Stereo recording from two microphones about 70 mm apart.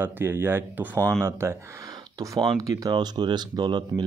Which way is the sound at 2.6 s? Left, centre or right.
Right.